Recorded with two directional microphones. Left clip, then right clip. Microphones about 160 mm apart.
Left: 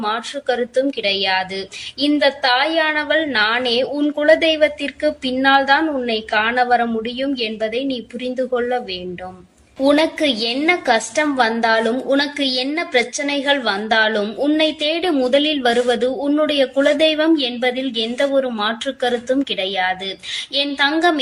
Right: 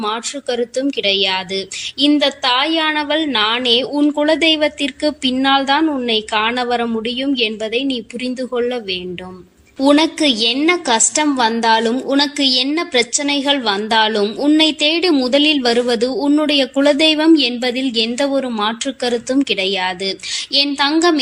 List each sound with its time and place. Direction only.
0.0 s a woman's voice: 45° right (ahead or behind)